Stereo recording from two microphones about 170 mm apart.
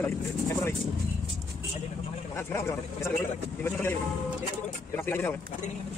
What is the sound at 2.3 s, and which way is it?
Speech, 15° left (ahead or behind).